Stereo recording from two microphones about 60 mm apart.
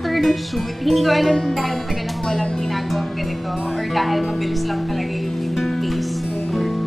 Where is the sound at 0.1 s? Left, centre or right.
Centre.